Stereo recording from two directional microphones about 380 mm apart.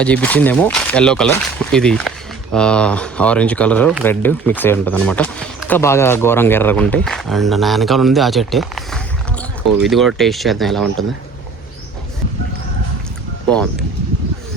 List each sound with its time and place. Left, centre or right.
0.0 s speech: centre